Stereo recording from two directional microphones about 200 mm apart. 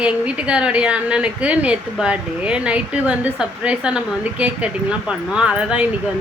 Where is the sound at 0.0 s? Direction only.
5° right (ahead or behind).